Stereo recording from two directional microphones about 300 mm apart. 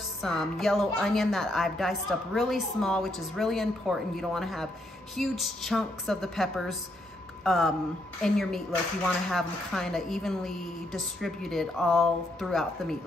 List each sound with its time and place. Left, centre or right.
0.2 s a woman's voice: centre